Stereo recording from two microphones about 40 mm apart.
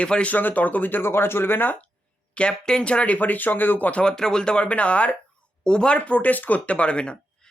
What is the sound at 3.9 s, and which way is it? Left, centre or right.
Speech, left.